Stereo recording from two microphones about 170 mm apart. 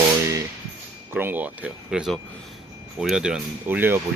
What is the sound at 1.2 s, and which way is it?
Speech, 10° right (ahead or behind).